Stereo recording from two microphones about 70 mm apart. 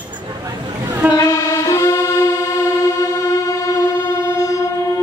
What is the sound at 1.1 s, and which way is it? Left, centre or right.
Saxophone, left.